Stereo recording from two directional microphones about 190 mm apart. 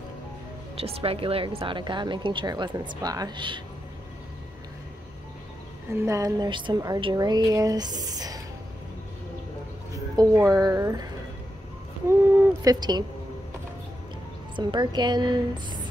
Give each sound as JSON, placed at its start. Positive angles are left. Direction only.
{"t": 0.7, "sound": "a woman's voice", "side_deg": -30}
{"t": 5.9, "sound": "a woman's voice", "side_deg": -15}
{"t": 9.9, "sound": "a woman's voice", "side_deg": -15}
{"t": 12.6, "sound": "a woman's voice", "side_deg": -20}
{"t": 14.5, "sound": "a woman's voice", "side_deg": -25}